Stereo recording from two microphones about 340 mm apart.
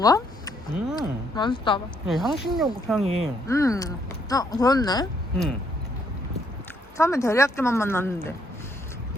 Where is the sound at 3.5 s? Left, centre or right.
Centre.